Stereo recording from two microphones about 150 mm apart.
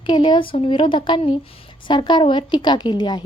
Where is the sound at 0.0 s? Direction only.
30° left (ahead or behind).